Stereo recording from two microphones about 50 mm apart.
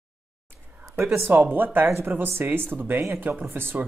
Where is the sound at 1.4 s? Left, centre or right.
Right.